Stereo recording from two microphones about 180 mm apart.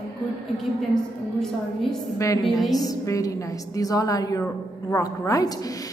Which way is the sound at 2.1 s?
20° left (ahead or behind).